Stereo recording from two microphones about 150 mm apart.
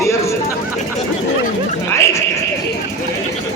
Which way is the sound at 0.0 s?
20° left (ahead or behind).